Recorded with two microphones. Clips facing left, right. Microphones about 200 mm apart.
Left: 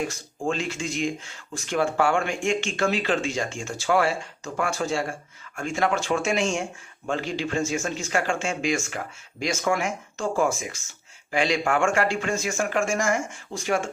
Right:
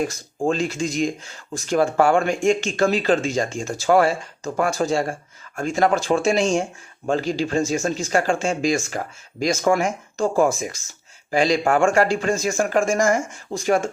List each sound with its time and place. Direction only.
0.1 s speech: 40° right (ahead or behind)